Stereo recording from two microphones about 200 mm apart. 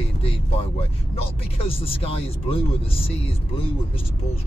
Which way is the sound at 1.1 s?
30° left (ahead or behind).